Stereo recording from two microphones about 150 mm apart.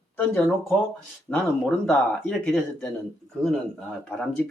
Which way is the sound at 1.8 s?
10° left (ahead or behind).